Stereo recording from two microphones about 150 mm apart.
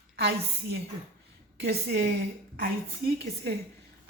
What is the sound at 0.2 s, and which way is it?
A woman's voice, 90° right.